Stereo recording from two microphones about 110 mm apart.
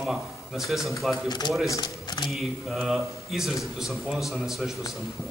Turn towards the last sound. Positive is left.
turn(degrees=-5)  # may be behind; listen again after turning